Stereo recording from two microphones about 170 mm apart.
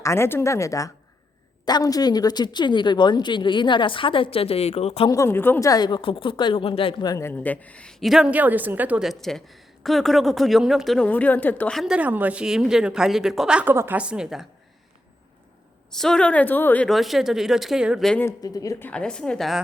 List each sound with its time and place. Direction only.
0.0 s speech: 15° left (ahead or behind); by 5.0 s 40° left (ahead or behind)
5.0 s speech: 20° left (ahead or behind); by 14.4 s 5° right (ahead or behind)
15.9 s speech: 5° left (ahead or behind)
18.2 s speech: 20° left (ahead or behind)
18.9 s speech: 5° left (ahead or behind)